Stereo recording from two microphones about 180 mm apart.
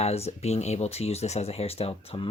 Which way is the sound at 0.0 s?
35° left (ahead or behind).